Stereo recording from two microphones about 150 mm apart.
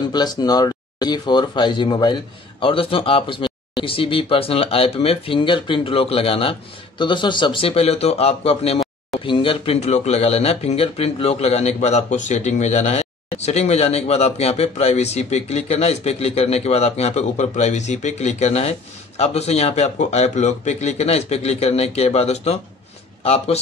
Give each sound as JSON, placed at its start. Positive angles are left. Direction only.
{"t": 0.1, "sound": "speech", "side_deg": 25}